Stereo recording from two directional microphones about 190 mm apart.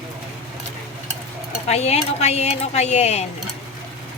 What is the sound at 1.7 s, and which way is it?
Speech, 35° left (ahead or behind).